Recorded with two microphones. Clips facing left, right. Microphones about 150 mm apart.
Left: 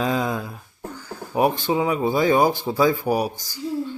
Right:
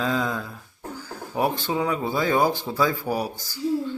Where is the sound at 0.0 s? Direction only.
15° left (ahead or behind).